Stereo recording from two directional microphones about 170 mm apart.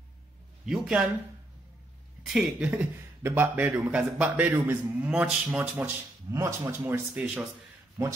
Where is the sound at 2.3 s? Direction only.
5° right (ahead or behind).